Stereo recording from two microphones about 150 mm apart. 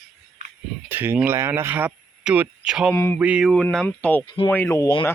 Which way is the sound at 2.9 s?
15° left (ahead or behind).